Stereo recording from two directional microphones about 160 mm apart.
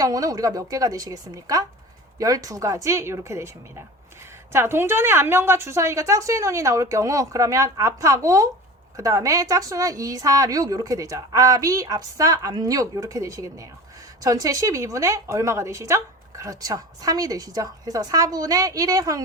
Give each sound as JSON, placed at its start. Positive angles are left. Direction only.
{"t": 0.0, "sound": "a woman's voice", "side_deg": -20}